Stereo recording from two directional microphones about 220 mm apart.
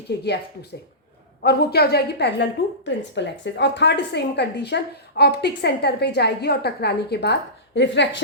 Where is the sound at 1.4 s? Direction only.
45° left (ahead or behind).